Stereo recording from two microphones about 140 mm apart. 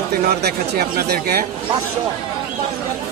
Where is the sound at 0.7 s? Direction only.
90° right.